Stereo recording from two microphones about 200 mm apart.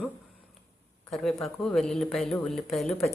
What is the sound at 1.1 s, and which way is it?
Speech, centre (ahead or behind).